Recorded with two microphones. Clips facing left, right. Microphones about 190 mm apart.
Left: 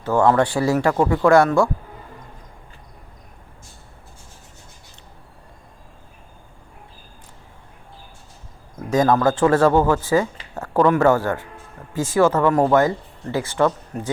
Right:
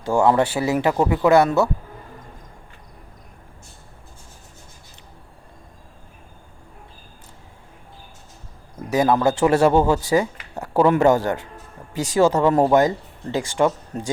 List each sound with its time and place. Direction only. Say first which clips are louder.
0.0 s speech: even; 10° right (ahead or behind)
0.3 s speech: left 1 dB; 25° right (ahead or behind)
0.8 s speech: right 1 dB; 5° right (ahead or behind)
8.9 s speech: left 1 dB; 10° right (ahead or behind)